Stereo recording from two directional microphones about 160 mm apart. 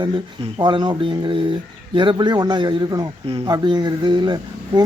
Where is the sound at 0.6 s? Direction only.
25° right (ahead or behind).